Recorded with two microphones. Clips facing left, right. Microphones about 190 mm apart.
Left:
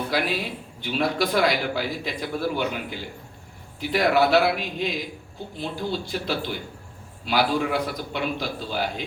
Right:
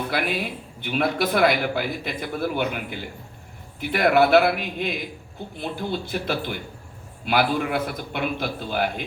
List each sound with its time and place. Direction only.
0.1 s a man's voice: 55° right (ahead or behind)